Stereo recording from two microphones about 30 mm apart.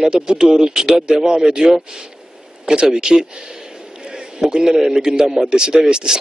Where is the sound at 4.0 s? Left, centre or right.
Right.